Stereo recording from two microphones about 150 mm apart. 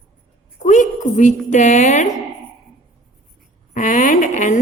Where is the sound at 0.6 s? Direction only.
60° left (ahead or behind).